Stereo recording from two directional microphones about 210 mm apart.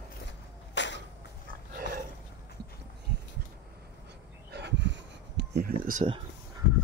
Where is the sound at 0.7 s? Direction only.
55° left (ahead or behind).